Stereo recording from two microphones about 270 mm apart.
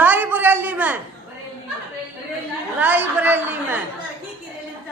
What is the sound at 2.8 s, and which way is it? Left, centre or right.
A woman's voice, centre.